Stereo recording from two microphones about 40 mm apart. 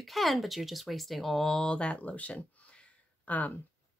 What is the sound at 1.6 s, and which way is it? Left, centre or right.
Speech, left.